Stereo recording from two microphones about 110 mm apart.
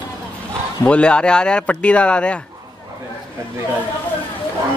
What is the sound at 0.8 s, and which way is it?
Speech, 10° left (ahead or behind).